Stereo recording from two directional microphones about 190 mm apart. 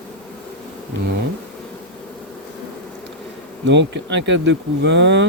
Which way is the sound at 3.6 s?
70° right (ahead or behind).